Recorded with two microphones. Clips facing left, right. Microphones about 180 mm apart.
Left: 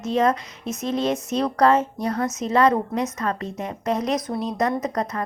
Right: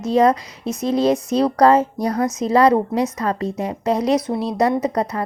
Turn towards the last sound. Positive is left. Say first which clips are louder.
# right 5 dB
turn(degrees=-30)  # may be behind; listen again after turning